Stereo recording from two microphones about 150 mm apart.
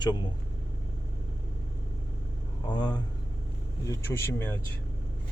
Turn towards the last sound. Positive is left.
turn(degrees=15)  # may be behind; listen again after turning